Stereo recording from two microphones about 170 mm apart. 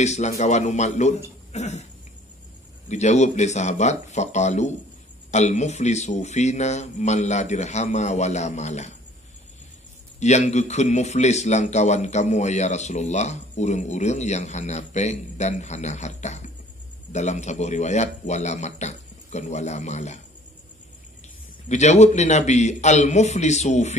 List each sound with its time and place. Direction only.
0.0 s a man's voice: 40° left (ahead or behind)
1.5 s cough: 40° left (ahead or behind)
2.9 s a man's voice: 40° left (ahead or behind)
10.2 s a man's voice: 45° left (ahead or behind)
21.6 s a man's voice: 40° left (ahead or behind)